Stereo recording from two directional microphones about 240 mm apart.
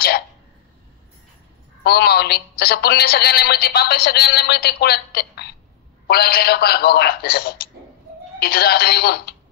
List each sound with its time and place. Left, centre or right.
1.9 s speech: left